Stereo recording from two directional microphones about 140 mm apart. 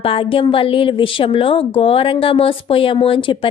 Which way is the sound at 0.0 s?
40° left (ahead or behind).